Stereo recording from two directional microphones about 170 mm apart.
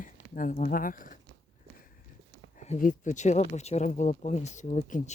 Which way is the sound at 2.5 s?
45° left (ahead or behind).